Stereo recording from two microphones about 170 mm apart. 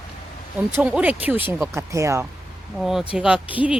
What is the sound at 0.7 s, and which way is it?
Speech, 10° right (ahead or behind).